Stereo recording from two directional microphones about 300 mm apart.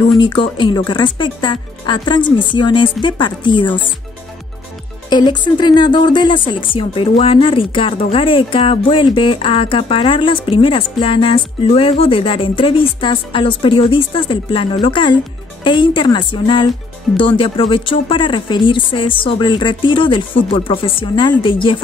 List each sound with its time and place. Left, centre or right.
0.2 s speech: centre
5.1 s speech: centre